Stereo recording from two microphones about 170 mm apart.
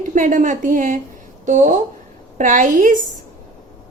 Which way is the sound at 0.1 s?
50° right (ahead or behind).